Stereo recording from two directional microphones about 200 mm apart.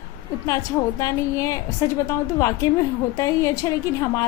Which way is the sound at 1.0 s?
15° left (ahead or behind).